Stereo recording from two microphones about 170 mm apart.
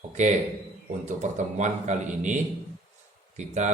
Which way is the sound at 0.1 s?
40° right (ahead or behind).